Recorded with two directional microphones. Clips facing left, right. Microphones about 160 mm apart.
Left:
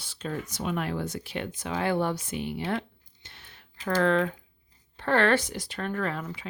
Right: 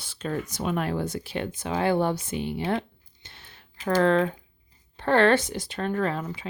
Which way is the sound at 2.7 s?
25° right (ahead or behind).